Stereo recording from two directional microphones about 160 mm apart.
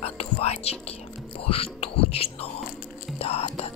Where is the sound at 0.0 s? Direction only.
40° left (ahead or behind).